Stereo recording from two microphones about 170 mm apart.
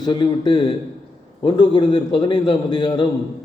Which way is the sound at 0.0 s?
25° left (ahead or behind).